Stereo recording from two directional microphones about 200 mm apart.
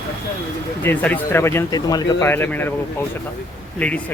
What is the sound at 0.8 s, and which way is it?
Speech, 10° left (ahead or behind).